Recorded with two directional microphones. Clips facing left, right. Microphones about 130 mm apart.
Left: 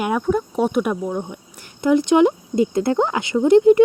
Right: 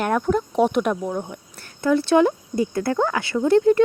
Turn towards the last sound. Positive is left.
turn(degrees=15)  # may be behind; listen again after turning